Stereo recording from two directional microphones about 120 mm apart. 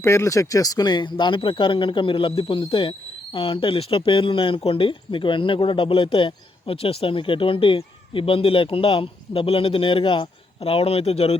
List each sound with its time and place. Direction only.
0.0 s speech: 20° left (ahead or behind); by 11.3 s 60° left (ahead or behind)